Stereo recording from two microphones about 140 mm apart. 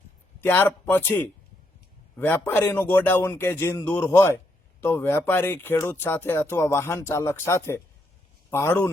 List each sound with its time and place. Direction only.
0.4 s speech: 15° left (ahead or behind)